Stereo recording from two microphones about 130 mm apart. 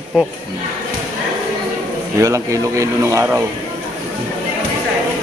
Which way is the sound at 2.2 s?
25° right (ahead or behind).